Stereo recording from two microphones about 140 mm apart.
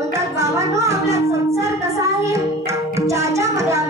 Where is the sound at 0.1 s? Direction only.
20° right (ahead or behind).